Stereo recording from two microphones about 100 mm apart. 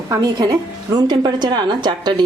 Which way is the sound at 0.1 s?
45° right (ahead or behind).